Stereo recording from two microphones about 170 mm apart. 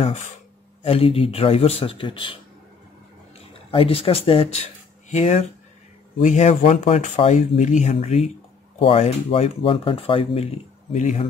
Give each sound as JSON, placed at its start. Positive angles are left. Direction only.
{"t": 0.0, "sound": "speech", "side_deg": 45}
{"t": 3.7, "sound": "speech", "side_deg": 35}